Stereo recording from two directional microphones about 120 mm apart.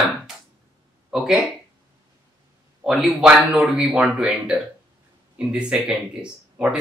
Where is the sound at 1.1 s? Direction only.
5° right (ahead or behind).